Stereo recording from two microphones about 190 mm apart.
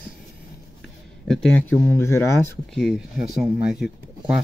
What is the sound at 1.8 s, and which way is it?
Speech, 15° left (ahead or behind).